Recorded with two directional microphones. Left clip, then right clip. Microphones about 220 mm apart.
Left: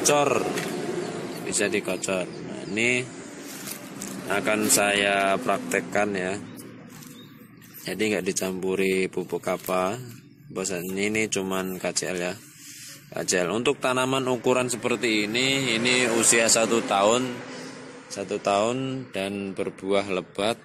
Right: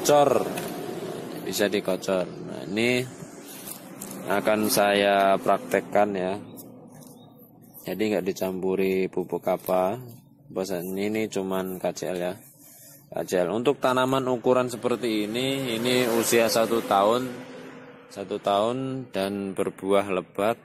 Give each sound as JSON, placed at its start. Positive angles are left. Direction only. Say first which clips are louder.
{"t": 0.0, "sound": "speech", "louder": "right 2 dB", "side_deg": -10}
{"t": 1.5, "sound": "speech", "louder": "right 1 dB", "side_deg": -15}
{"t": 4.3, "sound": "speech", "louder": "even", "side_deg": -15}
{"t": 7.8, "sound": "speech", "louder": "even", "side_deg": -10}